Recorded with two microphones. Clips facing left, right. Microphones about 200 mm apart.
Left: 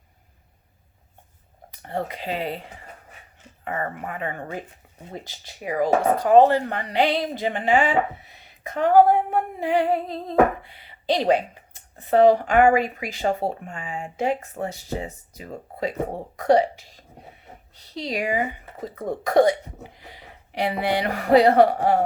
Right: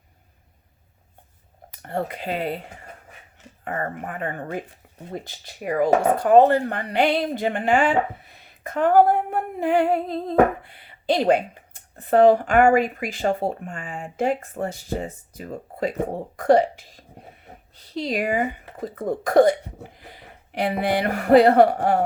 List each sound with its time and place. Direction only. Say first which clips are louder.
1.8 s speech: right 1 dB; 50° right (ahead or behind)
17.9 s speech: right 2 dB; 50° right (ahead or behind)